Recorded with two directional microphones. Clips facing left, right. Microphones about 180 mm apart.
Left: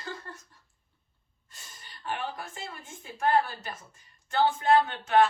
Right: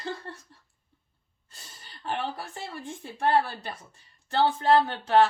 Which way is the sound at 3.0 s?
30° right (ahead or behind).